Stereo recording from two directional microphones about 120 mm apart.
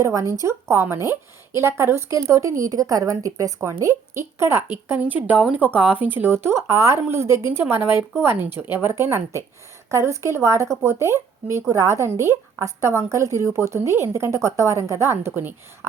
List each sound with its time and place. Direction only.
0.0 s a woman's voice: 25° right (ahead or behind)